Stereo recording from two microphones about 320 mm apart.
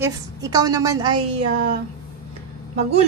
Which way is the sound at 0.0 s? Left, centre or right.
Centre.